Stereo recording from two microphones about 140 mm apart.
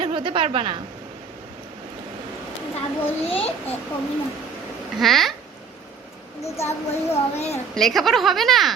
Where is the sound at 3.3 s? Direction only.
45° left (ahead or behind).